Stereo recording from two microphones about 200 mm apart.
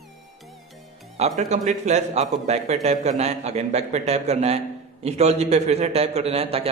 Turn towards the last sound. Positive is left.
turn(degrees=-30)  # may be behind; listen again after turning